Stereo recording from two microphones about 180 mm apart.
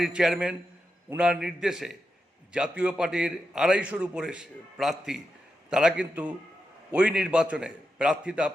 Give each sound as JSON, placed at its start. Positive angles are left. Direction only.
{"t": 0.0, "sound": "a man's voice", "side_deg": -5}